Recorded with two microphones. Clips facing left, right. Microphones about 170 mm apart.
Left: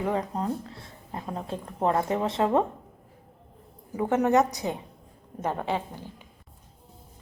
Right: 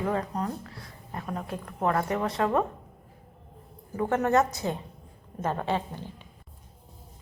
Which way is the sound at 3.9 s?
15° left (ahead or behind).